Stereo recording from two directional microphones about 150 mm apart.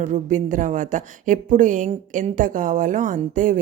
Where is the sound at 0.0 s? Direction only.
55° right (ahead or behind).